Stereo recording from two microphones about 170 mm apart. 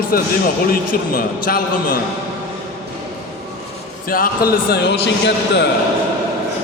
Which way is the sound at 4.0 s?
55° left (ahead or behind).